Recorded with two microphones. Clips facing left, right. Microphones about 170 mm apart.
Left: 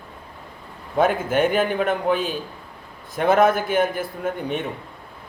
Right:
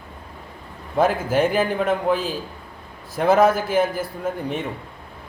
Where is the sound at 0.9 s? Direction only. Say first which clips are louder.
Even; 5° right (ahead or behind).